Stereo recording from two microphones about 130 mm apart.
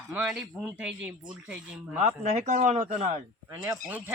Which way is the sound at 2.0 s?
60° right (ahead or behind).